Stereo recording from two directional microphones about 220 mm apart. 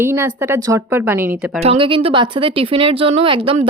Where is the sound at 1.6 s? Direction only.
25° right (ahead or behind).